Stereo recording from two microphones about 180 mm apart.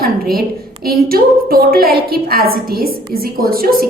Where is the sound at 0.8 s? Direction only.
55° right (ahead or behind).